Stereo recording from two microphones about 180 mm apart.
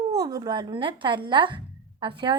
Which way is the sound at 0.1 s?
20° right (ahead or behind).